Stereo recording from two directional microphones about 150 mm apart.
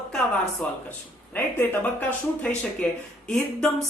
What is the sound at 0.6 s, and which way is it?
A woman's voice, 10° left (ahead or behind).